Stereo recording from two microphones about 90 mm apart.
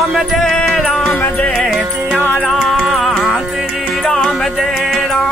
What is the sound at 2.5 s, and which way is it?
Music, centre (ahead or behind).